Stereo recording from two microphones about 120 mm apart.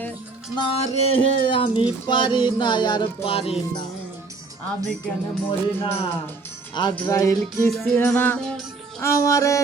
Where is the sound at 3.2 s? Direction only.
55° left (ahead or behind).